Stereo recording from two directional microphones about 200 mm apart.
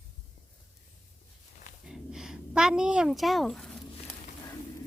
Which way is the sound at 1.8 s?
Centre (ahead or behind).